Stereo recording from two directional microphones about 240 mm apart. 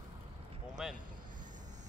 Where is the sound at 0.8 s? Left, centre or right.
Centre.